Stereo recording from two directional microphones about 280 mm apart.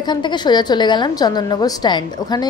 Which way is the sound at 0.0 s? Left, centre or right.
Centre.